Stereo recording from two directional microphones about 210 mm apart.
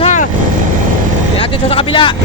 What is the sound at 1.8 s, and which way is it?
Speech, 25° left (ahead or behind).